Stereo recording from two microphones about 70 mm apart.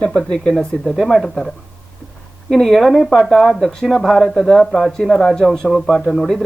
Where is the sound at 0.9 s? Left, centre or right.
Centre.